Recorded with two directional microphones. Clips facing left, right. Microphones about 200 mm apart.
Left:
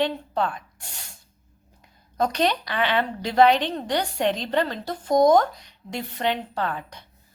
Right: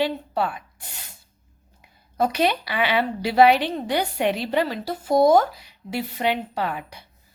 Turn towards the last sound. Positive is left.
turn(degrees=-10)  # may be behind; listen again after turning